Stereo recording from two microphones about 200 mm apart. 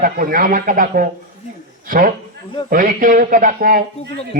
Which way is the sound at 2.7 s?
45° right (ahead or behind).